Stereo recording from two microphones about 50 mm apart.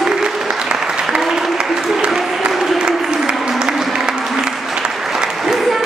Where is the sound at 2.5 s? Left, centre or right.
Centre.